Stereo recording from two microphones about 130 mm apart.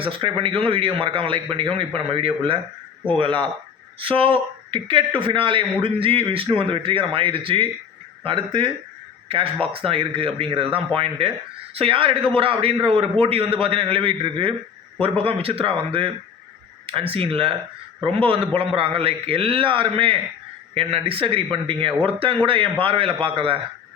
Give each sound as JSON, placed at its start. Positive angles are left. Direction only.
{"t": 0.0, "sound": "speech", "side_deg": -45}
{"t": 9.7, "sound": "speech", "side_deg": -45}